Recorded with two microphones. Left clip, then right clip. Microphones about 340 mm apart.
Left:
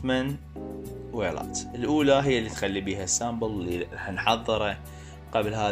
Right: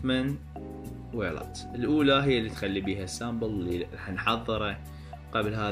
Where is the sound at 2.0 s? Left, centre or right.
Left.